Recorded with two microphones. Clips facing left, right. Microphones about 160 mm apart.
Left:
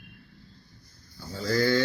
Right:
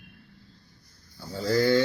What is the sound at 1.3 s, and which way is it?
Speech, 25° right (ahead or behind).